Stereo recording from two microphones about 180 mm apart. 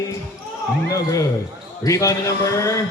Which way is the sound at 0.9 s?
20° left (ahead or behind).